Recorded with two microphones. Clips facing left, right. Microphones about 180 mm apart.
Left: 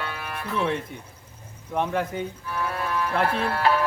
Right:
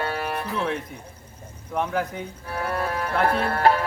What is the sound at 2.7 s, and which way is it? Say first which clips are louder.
Music: right 2 dB; 55° right (ahead or behind).